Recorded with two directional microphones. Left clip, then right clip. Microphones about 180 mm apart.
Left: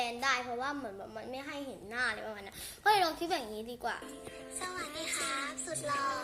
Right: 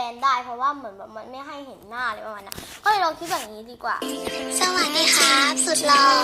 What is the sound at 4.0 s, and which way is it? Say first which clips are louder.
Speech: right 18 dB; 50° right (ahead or behind).